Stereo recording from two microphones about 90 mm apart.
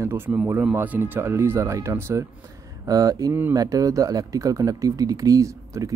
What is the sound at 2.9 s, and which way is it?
Speech, 40° right (ahead or behind).